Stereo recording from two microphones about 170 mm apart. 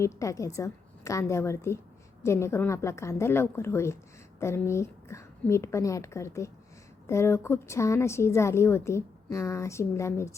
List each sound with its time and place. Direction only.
0.0 s a woman's voice: 20° left (ahead or behind)